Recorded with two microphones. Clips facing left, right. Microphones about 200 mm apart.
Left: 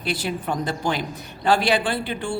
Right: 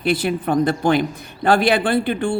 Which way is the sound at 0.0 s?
55° right (ahead or behind).